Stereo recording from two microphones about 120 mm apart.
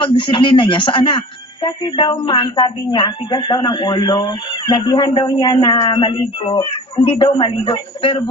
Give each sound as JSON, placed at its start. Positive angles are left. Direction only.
{"t": 0.0, "sound": "a man's voice", "side_deg": 45}